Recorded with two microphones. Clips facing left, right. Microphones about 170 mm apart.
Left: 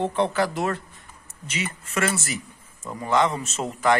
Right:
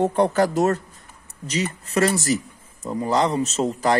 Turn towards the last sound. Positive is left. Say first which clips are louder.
# right 2 dB
turn(degrees=-35)  # may be behind; listen again after turning